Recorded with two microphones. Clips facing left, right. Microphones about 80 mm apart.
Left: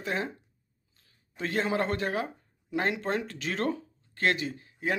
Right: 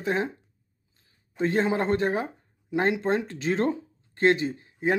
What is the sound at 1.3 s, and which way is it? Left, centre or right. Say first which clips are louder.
Speech: right 4 dB; right.